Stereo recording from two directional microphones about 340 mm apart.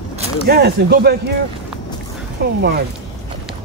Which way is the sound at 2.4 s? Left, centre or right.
Right.